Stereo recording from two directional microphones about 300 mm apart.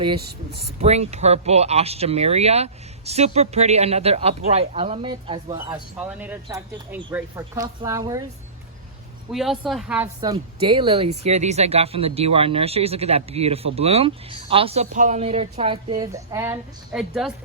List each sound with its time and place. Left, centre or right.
0.5 s speech: right
9.3 s speech: centre